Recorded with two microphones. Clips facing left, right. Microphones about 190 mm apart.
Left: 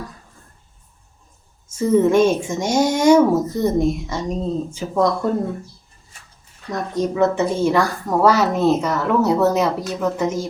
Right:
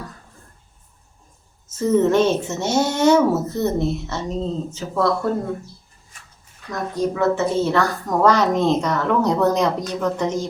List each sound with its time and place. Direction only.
1.6 s a woman's voice: 10° left (ahead or behind)
6.7 s a woman's voice: 20° left (ahead or behind)